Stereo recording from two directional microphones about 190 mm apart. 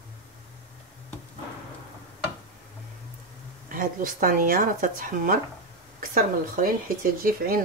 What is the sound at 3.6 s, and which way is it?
A woman's voice, 45° right (ahead or behind).